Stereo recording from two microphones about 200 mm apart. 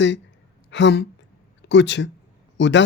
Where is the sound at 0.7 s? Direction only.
60° left (ahead or behind).